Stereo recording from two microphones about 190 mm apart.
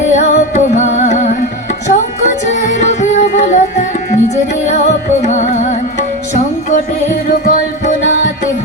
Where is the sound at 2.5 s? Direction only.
40° left (ahead or behind).